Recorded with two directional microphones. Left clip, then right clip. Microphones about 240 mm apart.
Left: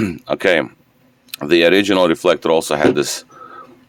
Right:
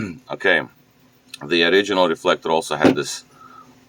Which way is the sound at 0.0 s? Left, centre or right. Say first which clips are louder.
Left 5 dB; left.